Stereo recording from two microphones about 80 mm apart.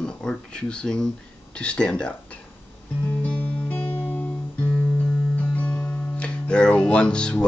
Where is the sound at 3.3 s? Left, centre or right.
Left.